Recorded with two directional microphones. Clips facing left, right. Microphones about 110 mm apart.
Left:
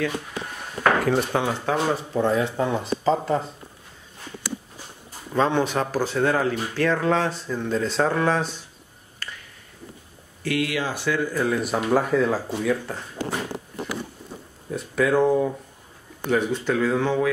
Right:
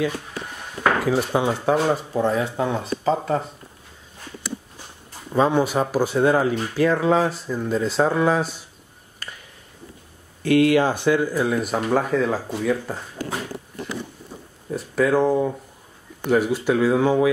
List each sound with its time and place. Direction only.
0.8 s speech: centre (ahead or behind)
5.3 s speech: 10° right (ahead or behind)
9.2 s a sound: 15° right (ahead or behind)
10.4 s speech: 35° right (ahead or behind)
11.3 s speech: 5° right (ahead or behind)
14.7 s speech: centre (ahead or behind)